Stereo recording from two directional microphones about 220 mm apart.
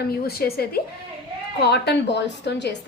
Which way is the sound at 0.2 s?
45° left (ahead or behind).